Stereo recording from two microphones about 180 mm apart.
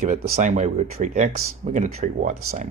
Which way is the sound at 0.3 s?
40° right (ahead or behind).